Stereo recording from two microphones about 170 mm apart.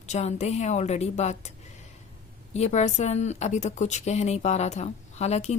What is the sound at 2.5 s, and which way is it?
A woman's voice, 40° left (ahead or behind).